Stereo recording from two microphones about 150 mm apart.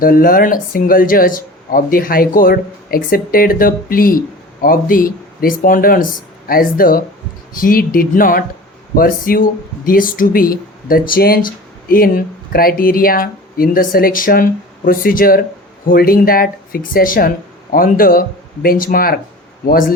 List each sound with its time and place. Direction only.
0.0 s speech: 75° left (ahead or behind)